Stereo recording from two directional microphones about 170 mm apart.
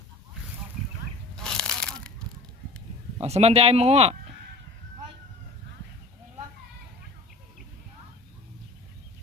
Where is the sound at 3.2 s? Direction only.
40° right (ahead or behind).